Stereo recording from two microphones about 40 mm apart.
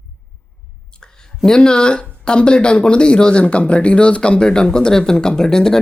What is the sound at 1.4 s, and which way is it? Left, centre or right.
Speech, centre.